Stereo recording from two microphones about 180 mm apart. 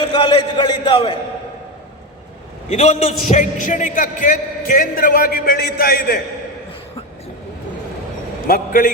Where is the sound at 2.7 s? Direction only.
35° left (ahead or behind); by 6.2 s 55° left (ahead or behind).